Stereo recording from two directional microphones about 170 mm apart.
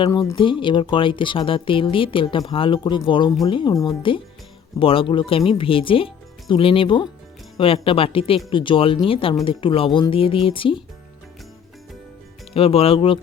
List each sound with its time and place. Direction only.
0.0 s speech: 20° left (ahead or behind)
12.5 s speech: 35° left (ahead or behind)